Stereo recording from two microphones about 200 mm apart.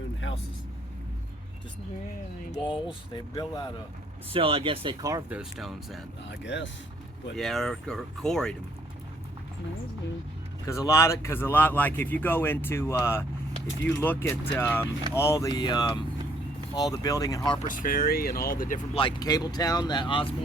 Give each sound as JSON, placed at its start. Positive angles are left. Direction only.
{"t": 2.5, "sound": "speech", "side_deg": 25}
{"t": 4.3, "sound": "speech", "side_deg": -25}
{"t": 5.4, "sound": "speech", "side_deg": 0}
{"t": 6.2, "sound": "speech", "side_deg": 60}
{"t": 7.3, "sound": "speech", "side_deg": 0}
{"t": 10.7, "sound": "speech", "side_deg": 15}
{"t": 17.6, "sound": "speech", "side_deg": 45}
{"t": 18.9, "sound": "speech", "side_deg": 20}